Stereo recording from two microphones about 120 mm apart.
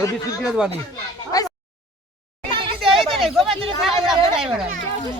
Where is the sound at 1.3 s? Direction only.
30° left (ahead or behind).